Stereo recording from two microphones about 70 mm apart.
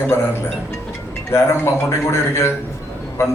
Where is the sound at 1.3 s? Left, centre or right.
Left.